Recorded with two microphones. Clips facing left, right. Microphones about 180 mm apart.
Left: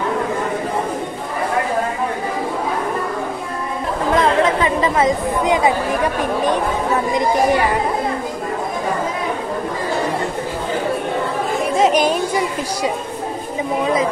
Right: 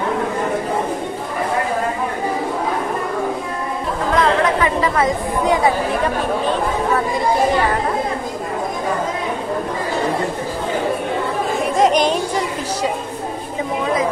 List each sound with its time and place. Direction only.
4.2 s chatter: 25° left (ahead or behind)
11.7 s music: 5° left (ahead or behind)